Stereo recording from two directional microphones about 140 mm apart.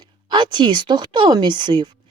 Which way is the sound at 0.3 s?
35° right (ahead or behind).